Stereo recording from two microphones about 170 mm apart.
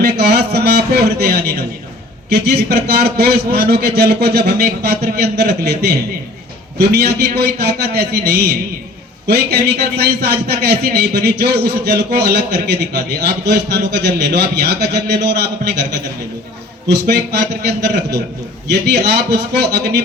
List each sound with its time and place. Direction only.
0.0 s a man's voice: 70° right (ahead or behind)
16.9 s a man's voice: 75° right (ahead or behind)